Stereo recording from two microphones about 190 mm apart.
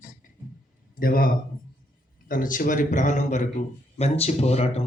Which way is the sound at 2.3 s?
45° left (ahead or behind).